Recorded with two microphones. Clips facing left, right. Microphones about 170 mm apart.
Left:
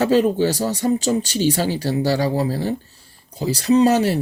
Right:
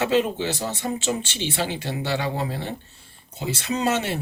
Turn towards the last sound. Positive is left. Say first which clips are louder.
# left 9 dB
turn(degrees=35)  # may be behind; listen again after turning